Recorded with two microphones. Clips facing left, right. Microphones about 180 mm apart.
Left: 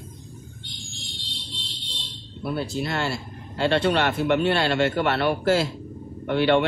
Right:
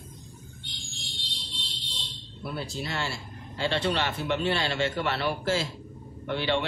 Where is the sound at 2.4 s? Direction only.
60° left (ahead or behind).